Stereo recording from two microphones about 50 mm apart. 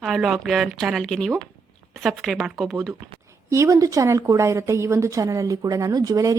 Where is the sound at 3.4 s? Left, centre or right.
Right.